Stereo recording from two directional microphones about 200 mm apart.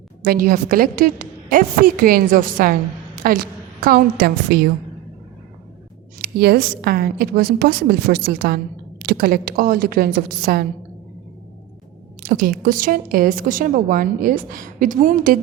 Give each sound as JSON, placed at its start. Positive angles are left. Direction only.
{"t": 0.3, "sound": "a woman's voice", "side_deg": -45}
{"t": 6.1, "sound": "a woman's voice", "side_deg": -50}
{"t": 12.2, "sound": "a woman's voice", "side_deg": -45}